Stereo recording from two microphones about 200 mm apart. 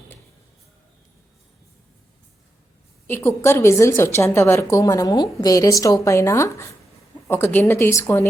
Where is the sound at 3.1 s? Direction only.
15° left (ahead or behind).